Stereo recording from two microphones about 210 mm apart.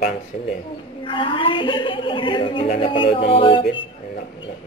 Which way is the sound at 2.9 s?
25° left (ahead or behind).